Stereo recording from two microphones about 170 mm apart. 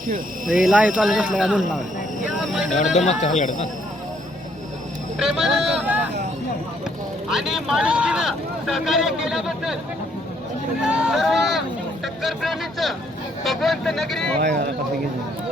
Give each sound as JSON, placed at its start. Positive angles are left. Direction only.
{"t": 0.4, "sound": "speech", "side_deg": -5}
{"t": 2.2, "sound": "vehicle", "side_deg": 0}
{"t": 2.7, "sound": "speech", "side_deg": 45}
{"t": 5.2, "sound": "speech", "side_deg": -5}
{"t": 7.3, "sound": "speech", "side_deg": 0}
{"t": 10.8, "sound": "speech", "side_deg": -5}